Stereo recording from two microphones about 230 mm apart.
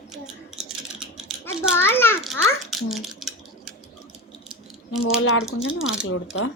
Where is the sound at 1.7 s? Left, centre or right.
Centre.